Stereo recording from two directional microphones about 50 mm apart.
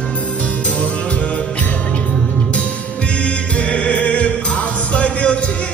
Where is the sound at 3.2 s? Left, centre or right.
Left.